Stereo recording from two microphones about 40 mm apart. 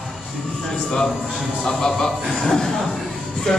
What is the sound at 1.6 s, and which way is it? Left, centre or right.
Speech, centre.